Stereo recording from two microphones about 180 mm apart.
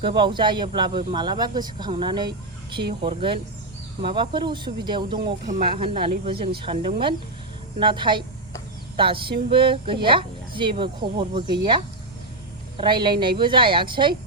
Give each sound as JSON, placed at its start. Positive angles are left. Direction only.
{"t": 0.0, "sound": "speech", "side_deg": -25}
{"t": 5.2, "sound": "speech", "side_deg": -50}
{"t": 5.7, "sound": "speech", "side_deg": -30}
{"t": 7.8, "sound": "speech", "side_deg": -25}
{"t": 12.7, "sound": "speech", "side_deg": -25}